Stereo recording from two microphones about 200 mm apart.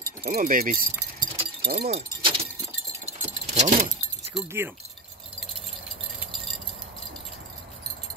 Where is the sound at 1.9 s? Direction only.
30° right (ahead or behind).